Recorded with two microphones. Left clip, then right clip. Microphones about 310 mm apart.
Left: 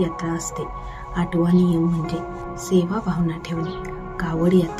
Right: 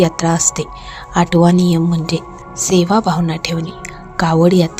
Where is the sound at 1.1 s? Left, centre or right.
Right.